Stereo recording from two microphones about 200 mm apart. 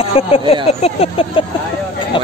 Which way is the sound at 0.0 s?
30° left (ahead or behind).